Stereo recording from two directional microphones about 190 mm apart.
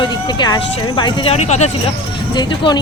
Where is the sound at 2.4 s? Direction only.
20° left (ahead or behind).